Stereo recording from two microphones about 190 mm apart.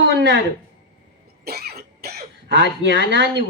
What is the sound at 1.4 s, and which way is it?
Speech, 55° right (ahead or behind).